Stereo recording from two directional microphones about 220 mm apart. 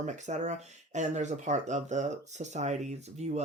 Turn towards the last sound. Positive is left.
turn(degrees=-30)  # may be behind; listen again after turning